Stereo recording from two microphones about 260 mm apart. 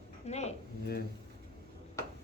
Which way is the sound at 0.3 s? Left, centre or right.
Left.